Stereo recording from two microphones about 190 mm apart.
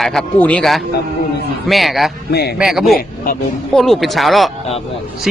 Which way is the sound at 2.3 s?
55° left (ahead or behind).